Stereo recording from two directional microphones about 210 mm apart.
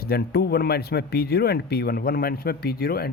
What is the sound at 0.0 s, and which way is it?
Speech, 50° left (ahead or behind).